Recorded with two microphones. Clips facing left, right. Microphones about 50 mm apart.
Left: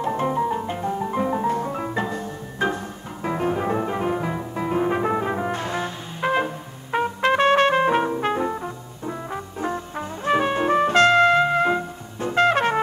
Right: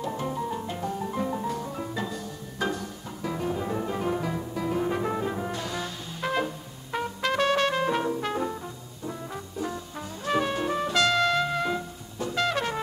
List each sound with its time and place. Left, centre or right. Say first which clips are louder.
0.0 s music: left 8 dB; left